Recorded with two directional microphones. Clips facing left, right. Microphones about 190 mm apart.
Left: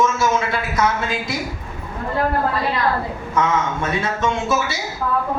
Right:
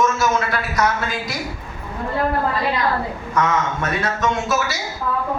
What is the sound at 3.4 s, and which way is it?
A man's voice, 25° left (ahead or behind).